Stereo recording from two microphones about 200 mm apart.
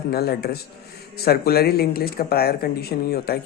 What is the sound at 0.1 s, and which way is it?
Speech, 50° left (ahead or behind).